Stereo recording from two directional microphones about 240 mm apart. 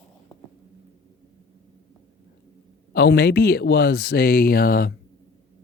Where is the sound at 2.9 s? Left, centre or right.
Left.